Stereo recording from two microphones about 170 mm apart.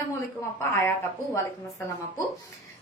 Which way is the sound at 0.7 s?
15° left (ahead or behind).